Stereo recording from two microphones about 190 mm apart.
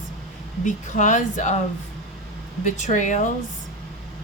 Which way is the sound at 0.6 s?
40° left (ahead or behind).